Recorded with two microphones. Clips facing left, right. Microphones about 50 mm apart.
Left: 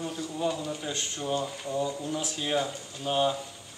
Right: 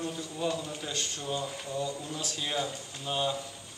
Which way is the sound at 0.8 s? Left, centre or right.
Left.